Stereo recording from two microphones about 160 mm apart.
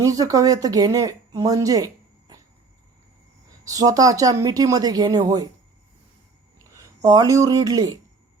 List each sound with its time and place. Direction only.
0.0 s speech: 20° right (ahead or behind)
3.6 s a woman's voice: 20° right (ahead or behind)
6.7 s speech: 25° right (ahead or behind)